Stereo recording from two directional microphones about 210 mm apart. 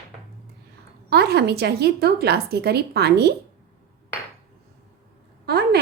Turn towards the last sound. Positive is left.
turn(degrees=-50)  # may be behind; listen again after turning